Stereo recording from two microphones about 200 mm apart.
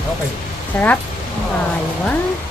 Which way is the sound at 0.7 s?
10° left (ahead or behind).